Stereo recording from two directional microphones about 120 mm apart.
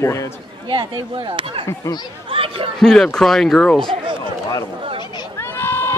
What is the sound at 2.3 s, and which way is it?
Chatter, 50° right (ahead or behind).